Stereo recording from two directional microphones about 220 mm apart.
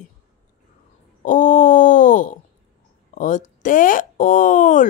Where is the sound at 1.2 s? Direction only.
35° left (ahead or behind).